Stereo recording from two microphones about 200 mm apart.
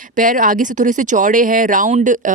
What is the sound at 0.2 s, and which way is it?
Speech, 45° right (ahead or behind).